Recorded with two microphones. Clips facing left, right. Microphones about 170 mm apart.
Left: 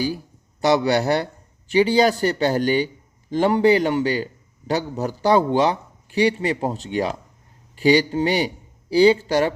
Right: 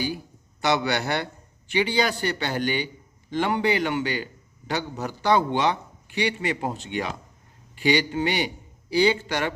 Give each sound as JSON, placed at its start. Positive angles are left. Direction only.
{"t": 0.6, "sound": "speech", "side_deg": 35}